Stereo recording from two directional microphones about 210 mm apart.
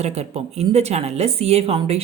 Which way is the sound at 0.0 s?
30° right (ahead or behind).